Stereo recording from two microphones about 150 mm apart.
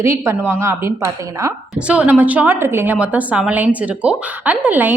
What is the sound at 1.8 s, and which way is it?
A woman's voice, 10° right (ahead or behind).